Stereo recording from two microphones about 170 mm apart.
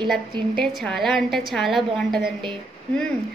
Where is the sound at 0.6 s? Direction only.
Centre (ahead or behind).